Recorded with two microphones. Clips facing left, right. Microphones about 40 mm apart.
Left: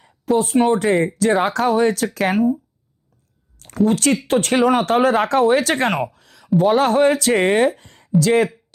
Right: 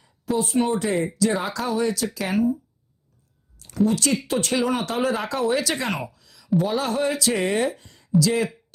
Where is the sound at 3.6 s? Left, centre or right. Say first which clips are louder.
Left 4 dB; left.